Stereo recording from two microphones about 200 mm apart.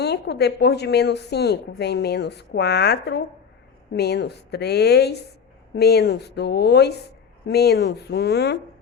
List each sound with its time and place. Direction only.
0.0 s a woman's voice: 55° left (ahead or behind)